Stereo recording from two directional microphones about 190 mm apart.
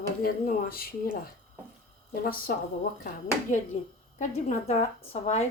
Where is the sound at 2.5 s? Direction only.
50° left (ahead or behind).